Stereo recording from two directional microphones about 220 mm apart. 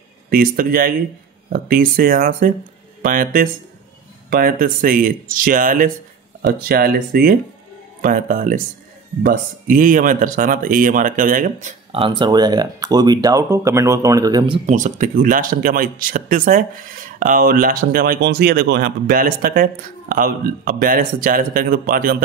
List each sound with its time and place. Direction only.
0.3 s speech: 40° right (ahead or behind)
11.9 s speech: 20° right (ahead or behind)
14.7 s speech: 35° right (ahead or behind)